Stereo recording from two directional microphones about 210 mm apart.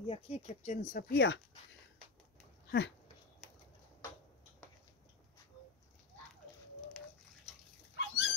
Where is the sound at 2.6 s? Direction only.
55° left (ahead or behind).